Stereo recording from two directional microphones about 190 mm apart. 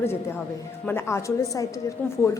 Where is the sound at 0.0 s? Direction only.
15° left (ahead or behind).